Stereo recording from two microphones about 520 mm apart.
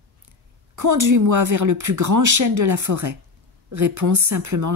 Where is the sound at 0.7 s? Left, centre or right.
Right.